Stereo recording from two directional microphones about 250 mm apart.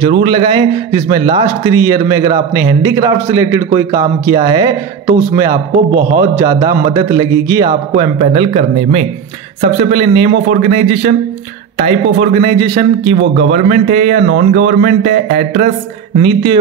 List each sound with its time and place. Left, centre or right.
0.1 s a man's voice: right
6.3 s a man's voice: centre